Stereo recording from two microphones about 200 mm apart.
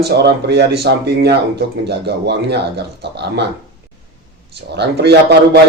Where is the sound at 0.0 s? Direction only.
55° right (ahead or behind).